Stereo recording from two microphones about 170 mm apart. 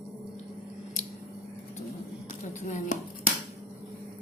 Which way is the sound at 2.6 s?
45° left (ahead or behind).